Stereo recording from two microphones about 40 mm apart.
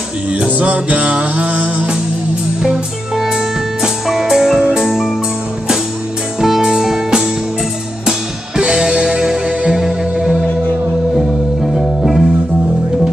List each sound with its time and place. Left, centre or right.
0.6 s music: right
2.6 s music: centre
6.4 s music: centre
8.5 s music: centre
11.1 s music: centre